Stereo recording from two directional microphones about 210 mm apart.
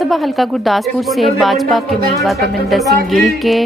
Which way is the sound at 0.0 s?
Centre (ahead or behind).